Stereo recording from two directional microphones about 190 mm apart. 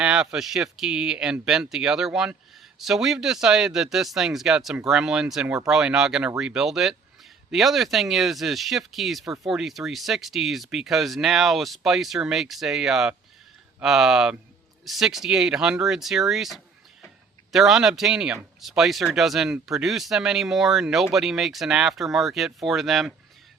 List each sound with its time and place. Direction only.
0.0 s speech: 5° right (ahead or behind)